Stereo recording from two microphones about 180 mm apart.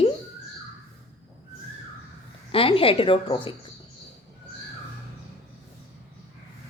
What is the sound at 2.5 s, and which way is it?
A woman's voice, 30° left (ahead or behind).